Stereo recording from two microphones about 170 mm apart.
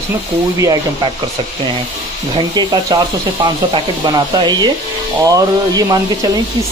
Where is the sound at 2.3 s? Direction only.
25° right (ahead or behind).